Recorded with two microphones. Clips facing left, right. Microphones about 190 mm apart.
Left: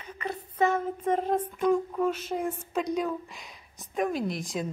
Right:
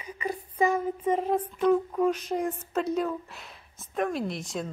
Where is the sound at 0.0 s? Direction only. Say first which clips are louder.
Right 2 dB; 10° right (ahead or behind).